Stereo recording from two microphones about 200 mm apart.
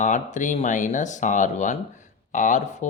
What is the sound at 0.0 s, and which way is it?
Speech, 40° left (ahead or behind).